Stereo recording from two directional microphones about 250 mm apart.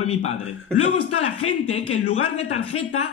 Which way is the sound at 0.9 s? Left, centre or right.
Left.